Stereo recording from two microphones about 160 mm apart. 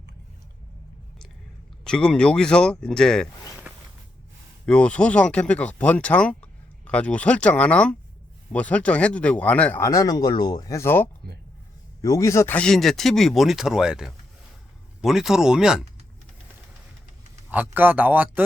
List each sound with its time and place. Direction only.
1.8 s speech: 5° left (ahead or behind)
4.6 s speech: 5° left (ahead or behind)
9.8 s speech: 20° left (ahead or behind)
12.5 s speech: 5° left (ahead or behind)
17.7 s speech: 10° right (ahead or behind)